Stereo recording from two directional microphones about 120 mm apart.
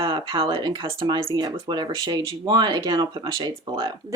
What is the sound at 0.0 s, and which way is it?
Speech, 45° right (ahead or behind).